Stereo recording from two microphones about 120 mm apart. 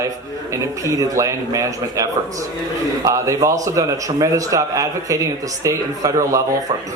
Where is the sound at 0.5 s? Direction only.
30° right (ahead or behind).